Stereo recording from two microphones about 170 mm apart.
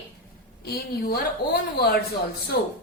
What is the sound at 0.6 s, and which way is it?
A woman's voice, 65° left (ahead or behind).